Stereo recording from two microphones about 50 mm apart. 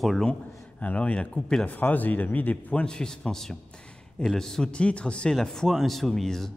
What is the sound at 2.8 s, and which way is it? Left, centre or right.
A man's voice, centre.